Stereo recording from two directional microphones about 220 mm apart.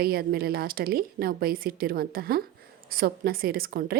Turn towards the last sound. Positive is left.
turn(degrees=-45)  # may be behind; listen again after turning